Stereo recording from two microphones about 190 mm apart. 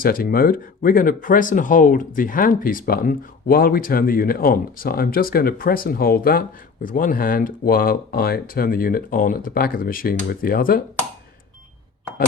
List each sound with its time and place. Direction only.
0.0 s speech: 50° left (ahead or behind)